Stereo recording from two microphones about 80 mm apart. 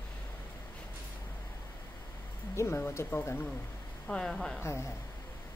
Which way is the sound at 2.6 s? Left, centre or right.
Left.